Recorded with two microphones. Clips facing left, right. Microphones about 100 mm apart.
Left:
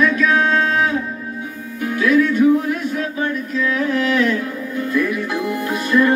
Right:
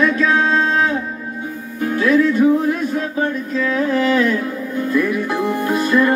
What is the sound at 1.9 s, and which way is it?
Music, 35° right (ahead or behind).